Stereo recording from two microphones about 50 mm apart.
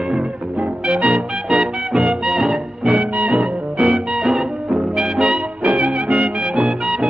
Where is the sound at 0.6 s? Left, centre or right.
Right.